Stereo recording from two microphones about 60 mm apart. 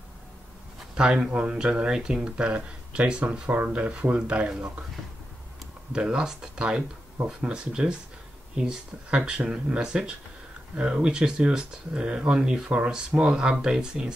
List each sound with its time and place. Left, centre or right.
0.9 s speech: centre
5.9 s speech: centre